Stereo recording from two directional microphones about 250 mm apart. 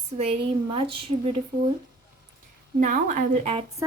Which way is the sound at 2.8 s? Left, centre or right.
Right.